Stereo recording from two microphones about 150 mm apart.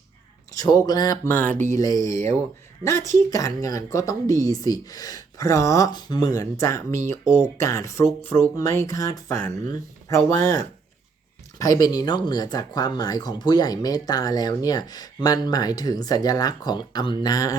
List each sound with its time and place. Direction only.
0.5 s speech: 25° left (ahead or behind)
1.3 s speech: 10° left (ahead or behind)
1.7 s speech: 25° left (ahead or behind)
11.6 s speech: 25° left (ahead or behind)